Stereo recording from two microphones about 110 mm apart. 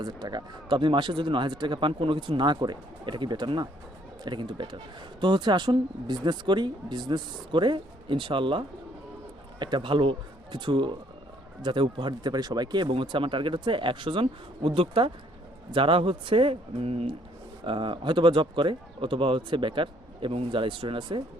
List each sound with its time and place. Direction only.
0.0 s speech: 40° right (ahead or behind); by 17.1 s 70° right (ahead or behind)
17.6 s speech: 50° right (ahead or behind)